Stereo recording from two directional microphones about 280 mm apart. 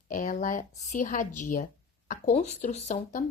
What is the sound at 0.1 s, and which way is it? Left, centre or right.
A woman's voice, left.